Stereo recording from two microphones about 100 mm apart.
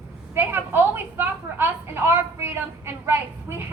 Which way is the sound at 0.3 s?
20° right (ahead or behind).